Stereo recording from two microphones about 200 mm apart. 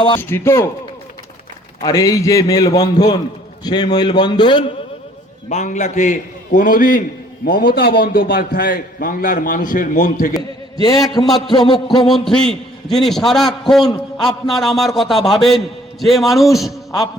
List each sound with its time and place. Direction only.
0.2 s a man's voice: 10° left (ahead or behind)
1.8 s a man's voice: 15° left (ahead or behind)
5.5 s a man's voice: 35° left (ahead or behind)
10.9 s a man's voice: centre (ahead or behind)
11.5 s a man's voice: 20° left (ahead or behind)
12.0 s a man's voice: centre (ahead or behind)